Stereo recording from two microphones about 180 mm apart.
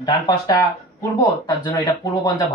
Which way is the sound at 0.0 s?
20° left (ahead or behind).